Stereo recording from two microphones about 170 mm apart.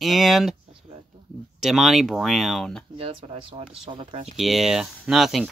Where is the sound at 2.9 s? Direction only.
35° right (ahead or behind).